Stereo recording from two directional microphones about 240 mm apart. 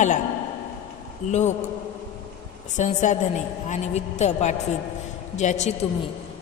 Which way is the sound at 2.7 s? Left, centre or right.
Left.